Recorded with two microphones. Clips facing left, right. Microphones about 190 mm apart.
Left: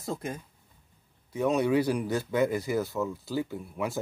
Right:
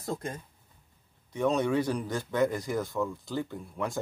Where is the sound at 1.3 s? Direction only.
5° left (ahead or behind).